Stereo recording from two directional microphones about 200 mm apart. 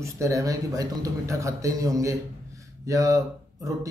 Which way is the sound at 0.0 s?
15° right (ahead or behind).